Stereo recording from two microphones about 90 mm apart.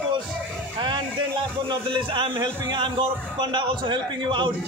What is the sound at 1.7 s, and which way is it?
A man's voice, 65° right (ahead or behind).